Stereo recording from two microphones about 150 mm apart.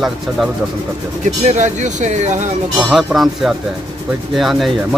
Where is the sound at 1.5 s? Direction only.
55° right (ahead or behind).